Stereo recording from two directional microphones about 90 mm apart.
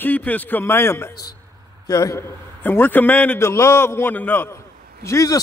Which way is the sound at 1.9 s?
45° left (ahead or behind).